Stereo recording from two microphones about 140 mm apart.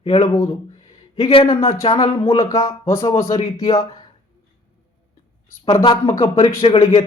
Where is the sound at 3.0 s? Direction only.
45° left (ahead or behind).